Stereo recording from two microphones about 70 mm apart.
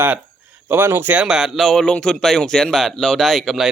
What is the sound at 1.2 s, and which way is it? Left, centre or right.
Speech, centre.